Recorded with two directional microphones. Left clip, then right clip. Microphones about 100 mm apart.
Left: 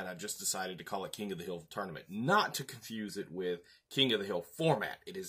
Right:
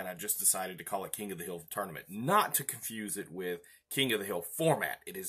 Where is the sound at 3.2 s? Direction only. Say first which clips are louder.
Left 2 dB; 15° left (ahead or behind).